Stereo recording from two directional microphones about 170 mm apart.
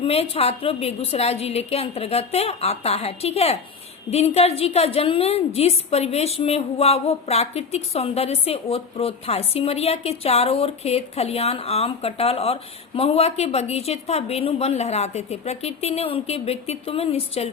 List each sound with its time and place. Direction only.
0.0 s a woman's voice: 35° left (ahead or behind)